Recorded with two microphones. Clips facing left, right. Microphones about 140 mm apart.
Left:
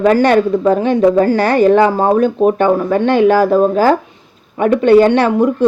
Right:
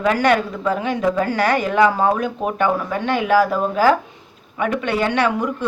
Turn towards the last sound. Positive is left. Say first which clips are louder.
# left 8 dB
turn(degrees=30)  # may be behind; listen again after turning